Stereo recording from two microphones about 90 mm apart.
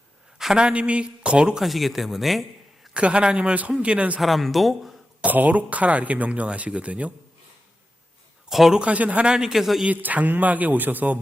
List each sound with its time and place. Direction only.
0.3 s speech: 5° right (ahead or behind)
2.9 s speech: 10° right (ahead or behind)
4.2 s a man's voice: centre (ahead or behind)
5.2 s speech: 20° right (ahead or behind)
8.4 s speech: centre (ahead or behind)
9.8 s speech: 20° right (ahead or behind)